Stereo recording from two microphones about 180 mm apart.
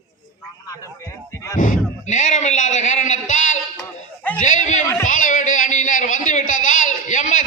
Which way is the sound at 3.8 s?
10° left (ahead or behind).